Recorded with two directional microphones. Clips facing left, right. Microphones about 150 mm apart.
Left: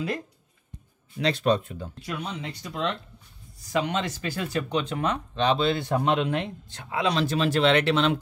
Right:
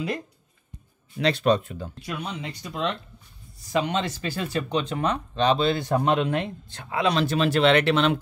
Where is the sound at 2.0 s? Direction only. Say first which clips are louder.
Even; 10° right (ahead or behind).